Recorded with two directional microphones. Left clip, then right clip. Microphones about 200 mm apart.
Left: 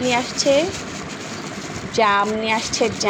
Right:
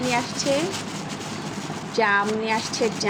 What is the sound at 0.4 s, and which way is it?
Speech, 10° left (ahead or behind).